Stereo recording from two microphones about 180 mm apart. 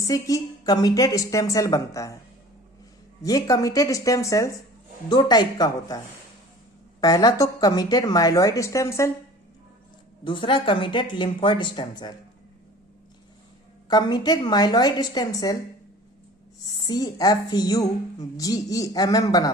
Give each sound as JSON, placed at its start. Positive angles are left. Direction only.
{"t": 0.1, "sound": "a woman's voice", "side_deg": 20}
{"t": 3.2, "sound": "a woman's voice", "side_deg": 20}
{"t": 7.0, "sound": "a woman's voice", "side_deg": 20}
{"t": 10.2, "sound": "a woman's voice", "side_deg": 30}
{"t": 13.8, "sound": "a woman's voice", "side_deg": 25}
{"t": 16.6, "sound": "a woman's voice", "side_deg": 20}